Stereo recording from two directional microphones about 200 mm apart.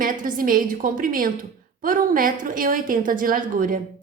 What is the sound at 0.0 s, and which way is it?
A woman's voice, 40° right (ahead or behind).